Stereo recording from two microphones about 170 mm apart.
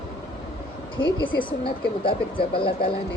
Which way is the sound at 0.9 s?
30° left (ahead or behind).